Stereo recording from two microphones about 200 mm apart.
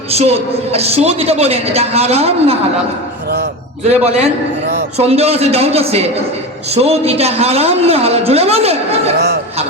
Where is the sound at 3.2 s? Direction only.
55° right (ahead or behind).